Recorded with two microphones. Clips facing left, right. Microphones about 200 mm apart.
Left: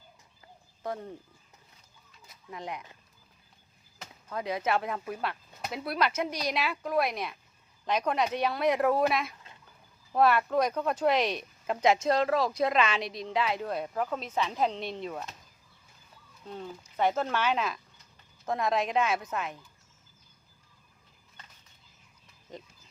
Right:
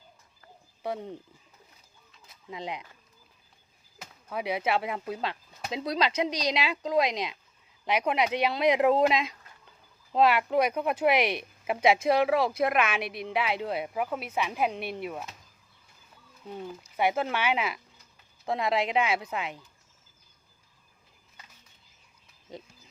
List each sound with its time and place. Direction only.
0.8 s speech: 15° right (ahead or behind)
2.5 s speech: 15° right (ahead or behind)
3.9 s speech: 10° right (ahead or behind)
13.0 s a woman's voice: 60° right (ahead or behind)
13.2 s speech: 10° right (ahead or behind)
16.5 s speech: 10° right (ahead or behind)